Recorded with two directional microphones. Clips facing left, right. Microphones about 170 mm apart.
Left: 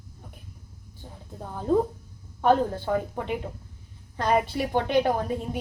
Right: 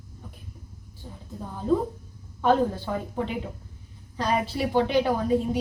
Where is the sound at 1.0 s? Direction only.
45° left (ahead or behind).